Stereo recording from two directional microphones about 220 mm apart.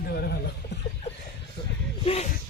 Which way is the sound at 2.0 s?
25° left (ahead or behind).